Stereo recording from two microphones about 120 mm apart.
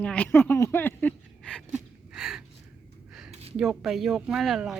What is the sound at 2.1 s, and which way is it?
Gasp, 5° right (ahead or behind).